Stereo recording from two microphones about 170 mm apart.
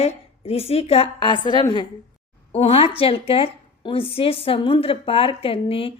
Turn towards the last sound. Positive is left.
turn(degrees=35)  # may be behind; listen again after turning